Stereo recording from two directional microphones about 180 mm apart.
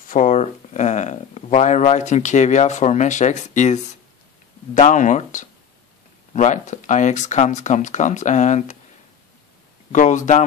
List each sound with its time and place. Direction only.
0.1 s speech: 40° left (ahead or behind)
9.9 s speech: 45° left (ahead or behind)